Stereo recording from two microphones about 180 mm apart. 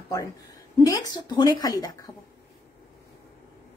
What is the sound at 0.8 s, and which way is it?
Speech, 20° left (ahead or behind).